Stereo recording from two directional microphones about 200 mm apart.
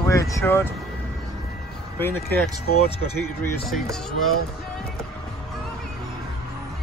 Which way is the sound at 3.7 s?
Centre (ahead or behind).